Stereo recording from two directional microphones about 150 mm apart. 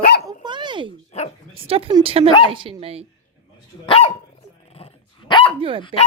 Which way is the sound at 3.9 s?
40° left (ahead or behind).